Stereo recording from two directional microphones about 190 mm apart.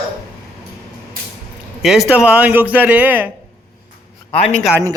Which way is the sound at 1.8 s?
Centre (ahead or behind).